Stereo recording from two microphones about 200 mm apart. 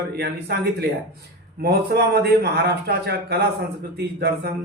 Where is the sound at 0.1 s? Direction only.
55° right (ahead or behind).